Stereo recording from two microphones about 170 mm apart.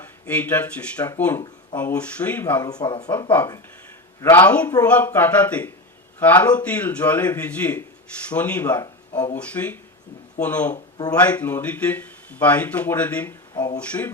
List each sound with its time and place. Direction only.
0.0 s speech: 10° left (ahead or behind)
2.6 s speech: 25° left (ahead or behind)
3.3 s speech: 15° left (ahead or behind)
13.5 s speech: 25° left (ahead or behind)
13.7 s speech: 10° left (ahead or behind)